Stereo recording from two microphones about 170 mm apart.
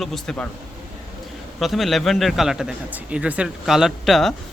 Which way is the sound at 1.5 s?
Centre (ahead or behind).